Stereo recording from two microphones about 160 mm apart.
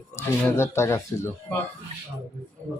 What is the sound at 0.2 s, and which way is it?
Speech, 15° left (ahead or behind).